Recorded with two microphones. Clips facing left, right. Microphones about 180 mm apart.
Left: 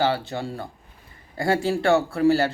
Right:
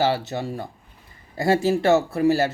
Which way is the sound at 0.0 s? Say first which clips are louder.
Right 1 dB; 20° right (ahead or behind).